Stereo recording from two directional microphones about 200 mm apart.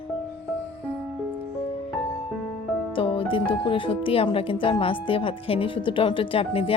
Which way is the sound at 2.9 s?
25° left (ahead or behind).